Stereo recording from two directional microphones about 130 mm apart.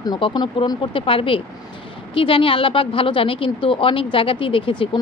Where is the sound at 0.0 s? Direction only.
30° left (ahead or behind).